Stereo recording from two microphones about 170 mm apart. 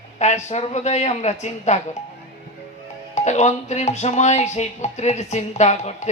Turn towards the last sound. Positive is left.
turn(degrees=40)  # may be behind; listen again after turning